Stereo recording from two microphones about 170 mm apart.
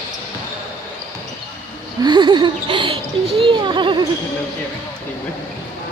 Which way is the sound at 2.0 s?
25° right (ahead or behind).